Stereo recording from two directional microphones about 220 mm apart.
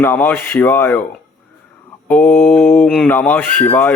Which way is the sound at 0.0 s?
10° left (ahead or behind).